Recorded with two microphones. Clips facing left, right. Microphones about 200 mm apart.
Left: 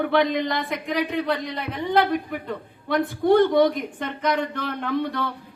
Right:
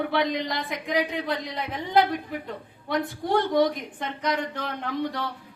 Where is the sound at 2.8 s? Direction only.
55° left (ahead or behind).